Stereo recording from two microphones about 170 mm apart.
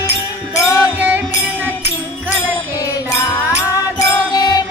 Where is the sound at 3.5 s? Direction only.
20° left (ahead or behind).